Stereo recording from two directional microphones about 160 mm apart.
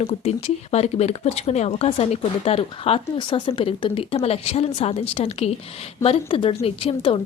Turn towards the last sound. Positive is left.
turn(degrees=35)  # may be behind; listen again after turning